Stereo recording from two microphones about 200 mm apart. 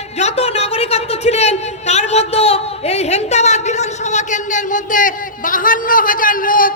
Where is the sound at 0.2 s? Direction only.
30° left (ahead or behind).